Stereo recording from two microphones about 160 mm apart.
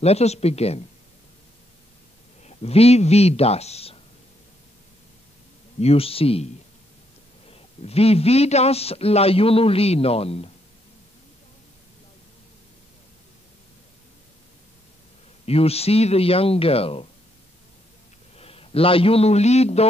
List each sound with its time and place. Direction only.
0.0 s a man's voice: 40° left (ahead or behind)
2.4 s a man's voice: 40° left (ahead or behind)
5.8 s a man's voice: 40° left (ahead or behind)
7.4 s a man's voice: 40° left (ahead or behind)
15.4 s a man's voice: 40° left (ahead or behind)
18.4 s a man's voice: 35° left (ahead or behind)